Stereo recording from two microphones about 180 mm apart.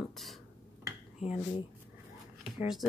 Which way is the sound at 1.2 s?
35° left (ahead or behind).